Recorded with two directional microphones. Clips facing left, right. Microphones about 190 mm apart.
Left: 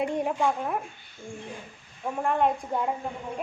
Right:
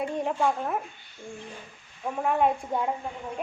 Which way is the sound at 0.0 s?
20° left (ahead or behind).